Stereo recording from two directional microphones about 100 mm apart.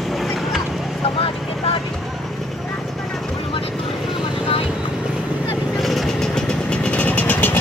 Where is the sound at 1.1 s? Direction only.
60° left (ahead or behind).